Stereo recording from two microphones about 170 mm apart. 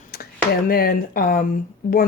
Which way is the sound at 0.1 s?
65° left (ahead or behind).